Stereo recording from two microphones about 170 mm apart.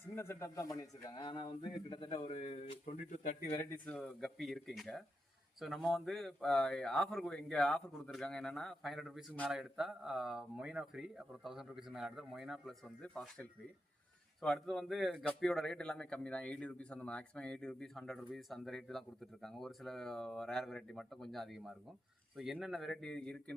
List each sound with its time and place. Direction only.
0.2 s speech: 15° left (ahead or behind); by 2.9 s 35° left (ahead or behind)
2.9 s speech: 50° left (ahead or behind)
3.5 s speech: 15° left (ahead or behind)
3.8 s a man's voice: 5° left (ahead or behind)